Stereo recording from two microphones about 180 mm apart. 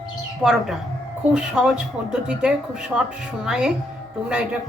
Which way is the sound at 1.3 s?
5° right (ahead or behind).